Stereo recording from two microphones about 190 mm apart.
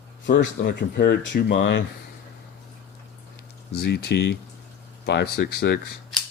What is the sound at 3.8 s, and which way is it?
Speech, 60° left (ahead or behind).